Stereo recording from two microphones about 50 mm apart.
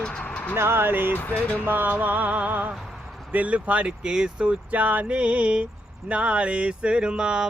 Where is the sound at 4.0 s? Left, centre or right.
Centre.